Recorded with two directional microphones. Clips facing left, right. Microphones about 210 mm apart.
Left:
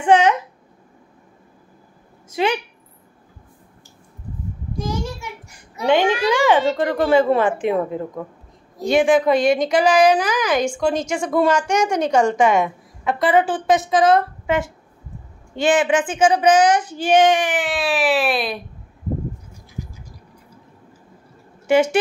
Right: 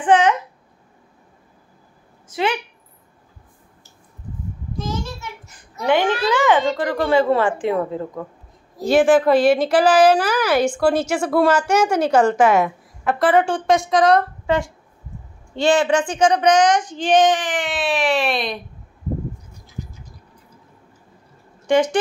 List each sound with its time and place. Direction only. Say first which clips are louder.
0.0 s a sound: left 1 dB; 10° left (ahead or behind)
2.2 s a woman's voice: left 2 dB; 15° left (ahead or behind)
4.7 s child singing: left 2 dB; 15° left (ahead or behind)
5.9 s a woman's voice: left 1 dB; 15° left (ahead or behind)
8.7 s a woman's voice: right 1 dB; 5° right (ahead or behind)
14.4 s a sound: right 1 dB; 20° left (ahead or behind)
15.6 s a woman's voice: even; 20° left (ahead or behind)
16.2 s speech: left 1 dB; 5° left (ahead or behind)
21.6 s speech: left 1 dB; 10° left (ahead or behind)